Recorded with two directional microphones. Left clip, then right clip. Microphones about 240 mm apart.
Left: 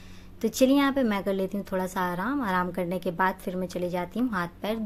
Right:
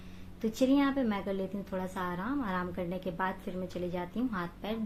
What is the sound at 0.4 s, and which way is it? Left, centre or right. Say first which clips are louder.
A woman's voice: left 6 dB; left.